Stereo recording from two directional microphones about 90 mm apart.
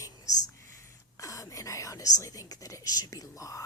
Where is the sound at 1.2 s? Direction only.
35° left (ahead or behind).